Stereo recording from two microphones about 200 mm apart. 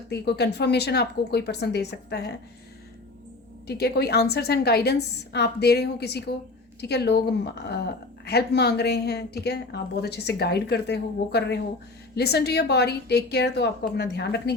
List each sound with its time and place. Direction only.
0.1 s speech: 55° left (ahead or behind)
3.7 s a woman's voice: 55° left (ahead or behind)